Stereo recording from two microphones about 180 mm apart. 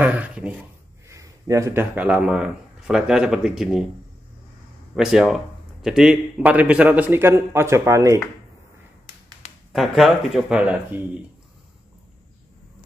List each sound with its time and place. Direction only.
0.0 s speech: 10° right (ahead or behind)
4.9 s a man's voice: centre (ahead or behind)
9.7 s speech: centre (ahead or behind)